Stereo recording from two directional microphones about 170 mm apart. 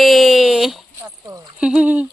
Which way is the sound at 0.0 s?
Centre (ahead or behind).